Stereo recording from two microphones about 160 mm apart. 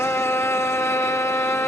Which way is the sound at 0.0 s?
15° left (ahead or behind).